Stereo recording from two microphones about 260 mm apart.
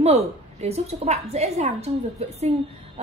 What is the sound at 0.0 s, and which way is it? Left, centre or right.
A woman's voice, right.